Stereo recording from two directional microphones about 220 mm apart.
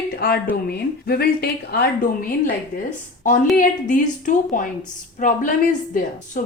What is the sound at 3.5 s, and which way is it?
A woman's voice, 35° left (ahead or behind).